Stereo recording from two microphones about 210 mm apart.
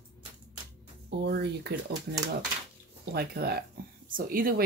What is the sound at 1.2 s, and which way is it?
Speech, 50° right (ahead or behind).